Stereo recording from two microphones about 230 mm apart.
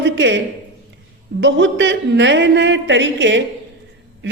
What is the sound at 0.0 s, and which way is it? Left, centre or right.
A woman's voice, right.